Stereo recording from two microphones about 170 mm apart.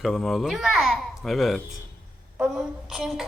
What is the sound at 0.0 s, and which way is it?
A child's voice, centre (ahead or behind).